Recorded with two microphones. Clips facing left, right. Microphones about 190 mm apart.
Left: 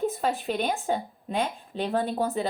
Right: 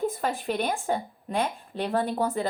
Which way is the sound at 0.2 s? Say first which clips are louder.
Left 1 dB; 50° right (ahead or behind).